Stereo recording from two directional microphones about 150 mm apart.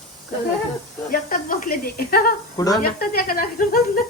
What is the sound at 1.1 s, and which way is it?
Speech, 60° left (ahead or behind).